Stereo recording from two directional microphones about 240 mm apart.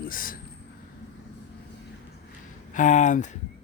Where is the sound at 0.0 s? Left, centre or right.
Left.